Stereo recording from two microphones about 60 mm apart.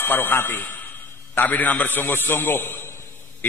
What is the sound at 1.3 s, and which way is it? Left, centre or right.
A man's voice, left.